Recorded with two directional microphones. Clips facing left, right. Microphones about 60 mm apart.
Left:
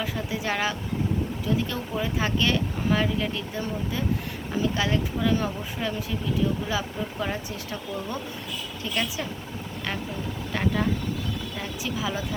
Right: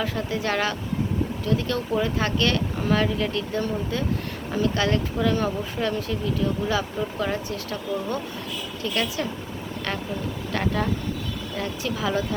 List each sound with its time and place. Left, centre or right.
0.0 s speech: centre
10.5 s speech: centre